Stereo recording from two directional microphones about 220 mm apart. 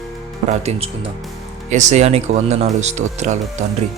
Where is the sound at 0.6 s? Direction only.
25° right (ahead or behind).